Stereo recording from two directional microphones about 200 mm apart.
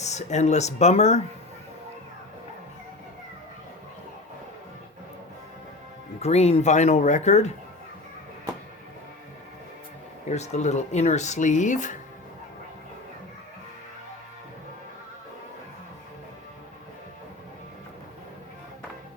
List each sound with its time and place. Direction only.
0.0 s speech: 35° left (ahead or behind)
6.1 s speech: 30° left (ahead or behind)
10.2 s speech: 35° left (ahead or behind)